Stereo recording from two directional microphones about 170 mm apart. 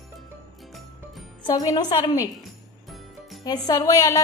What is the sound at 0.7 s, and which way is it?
Music, centre (ahead or behind).